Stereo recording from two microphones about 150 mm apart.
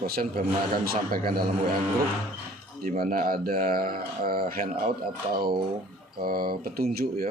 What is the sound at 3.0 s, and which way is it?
Speech, 70° right (ahead or behind).